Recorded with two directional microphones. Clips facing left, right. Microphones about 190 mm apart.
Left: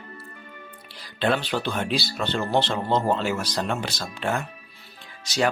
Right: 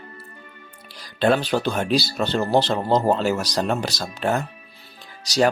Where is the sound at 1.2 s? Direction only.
40° right (ahead or behind).